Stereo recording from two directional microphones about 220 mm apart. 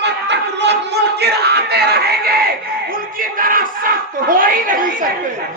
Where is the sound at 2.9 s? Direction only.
40° right (ahead or behind).